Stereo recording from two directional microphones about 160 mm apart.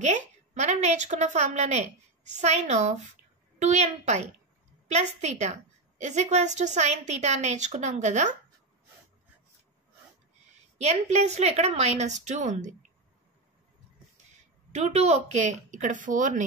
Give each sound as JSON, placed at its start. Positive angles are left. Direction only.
{"t": 0.0, "sound": "a woman's voice", "side_deg": -45}
{"t": 10.8, "sound": "a woman's voice", "side_deg": -45}
{"t": 14.7, "sound": "a woman's voice", "side_deg": -45}